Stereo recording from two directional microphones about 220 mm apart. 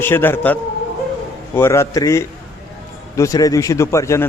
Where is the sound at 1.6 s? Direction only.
10° left (ahead or behind).